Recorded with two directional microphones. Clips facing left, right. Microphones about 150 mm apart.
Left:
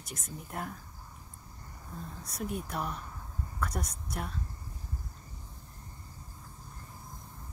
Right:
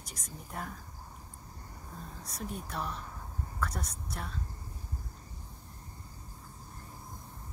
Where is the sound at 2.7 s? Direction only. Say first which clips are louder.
Left 2 dB; 5° left (ahead or behind).